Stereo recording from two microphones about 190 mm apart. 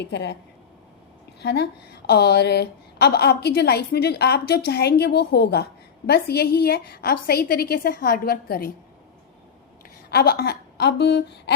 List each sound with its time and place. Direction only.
0.0 s a woman's voice: 65° left (ahead or behind)
1.4 s a woman's voice: 60° left (ahead or behind)
10.1 s a woman's voice: 55° left (ahead or behind)